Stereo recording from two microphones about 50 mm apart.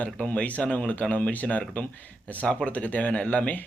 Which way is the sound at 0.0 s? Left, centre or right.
Left.